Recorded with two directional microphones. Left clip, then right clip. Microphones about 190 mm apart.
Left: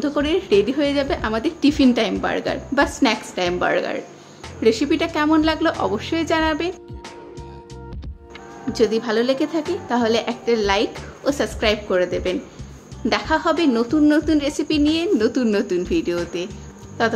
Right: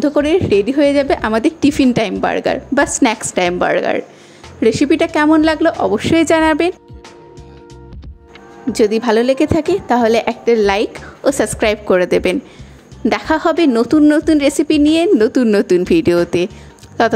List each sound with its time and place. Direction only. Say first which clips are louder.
0.0 s a woman's voice: right 7 dB; 30° right (ahead or behind)
8.7 s a woman's voice: right 6 dB; 40° right (ahead or behind)
13.1 s a woman's voice: right 4 dB; 45° right (ahead or behind)